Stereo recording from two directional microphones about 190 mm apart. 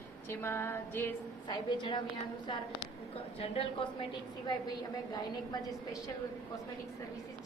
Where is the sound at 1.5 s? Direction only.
25° left (ahead or behind).